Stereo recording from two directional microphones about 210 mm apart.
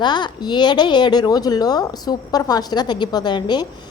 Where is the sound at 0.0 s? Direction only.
20° left (ahead or behind).